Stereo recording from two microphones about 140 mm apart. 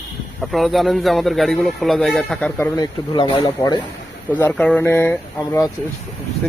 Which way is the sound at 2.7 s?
30° left (ahead or behind).